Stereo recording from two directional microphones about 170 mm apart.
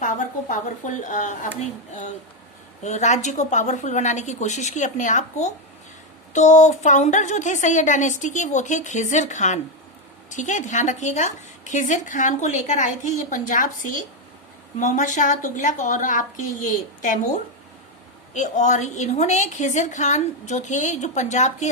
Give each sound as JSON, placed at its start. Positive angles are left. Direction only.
{"t": 0.0, "sound": "a woman's voice", "side_deg": 50}
{"t": 2.8, "sound": "a woman's voice", "side_deg": 45}